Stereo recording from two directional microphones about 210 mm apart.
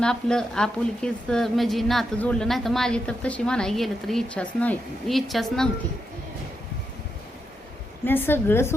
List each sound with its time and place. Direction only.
0.0 s a woman's voice: 5° left (ahead or behind)
8.0 s a woman's voice: 10° left (ahead or behind)